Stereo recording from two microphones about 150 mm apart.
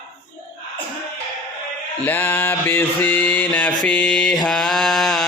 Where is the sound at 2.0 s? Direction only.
15° left (ahead or behind).